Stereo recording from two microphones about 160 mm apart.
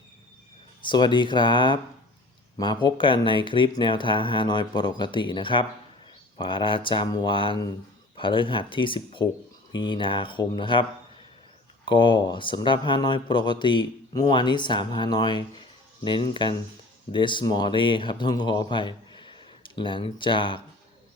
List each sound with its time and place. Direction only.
0.9 s speech: 30° left (ahead or behind)
11.9 s speech: 30° left (ahead or behind)